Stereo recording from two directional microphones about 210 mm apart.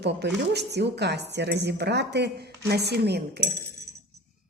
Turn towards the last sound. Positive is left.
turn(degrees=-50)  # may be behind; listen again after turning